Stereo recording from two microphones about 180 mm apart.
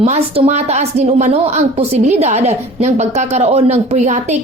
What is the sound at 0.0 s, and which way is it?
A woman's voice, 40° right (ahead or behind).